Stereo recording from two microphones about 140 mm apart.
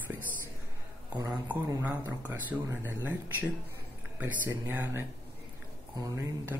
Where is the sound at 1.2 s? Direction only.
10° right (ahead or behind).